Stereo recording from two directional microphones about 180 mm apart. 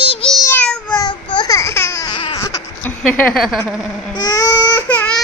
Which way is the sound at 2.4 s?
15° left (ahead or behind).